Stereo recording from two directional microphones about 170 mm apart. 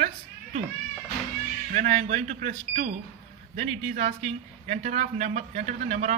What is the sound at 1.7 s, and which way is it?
Speech, 45° right (ahead or behind).